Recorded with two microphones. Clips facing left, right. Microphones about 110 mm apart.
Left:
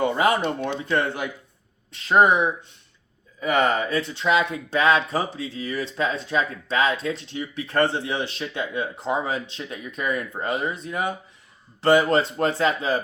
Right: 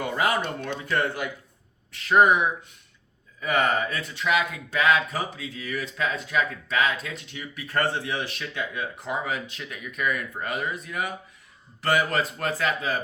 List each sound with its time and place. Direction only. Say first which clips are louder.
0.0 s speech: left 5 dB; 25° left (ahead or behind)